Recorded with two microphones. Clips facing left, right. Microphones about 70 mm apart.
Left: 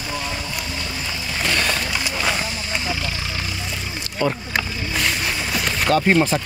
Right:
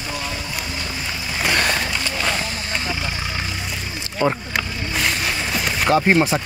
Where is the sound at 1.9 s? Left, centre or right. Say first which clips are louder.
Even; centre.